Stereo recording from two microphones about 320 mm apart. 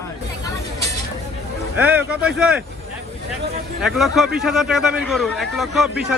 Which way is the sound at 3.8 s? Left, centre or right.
Centre.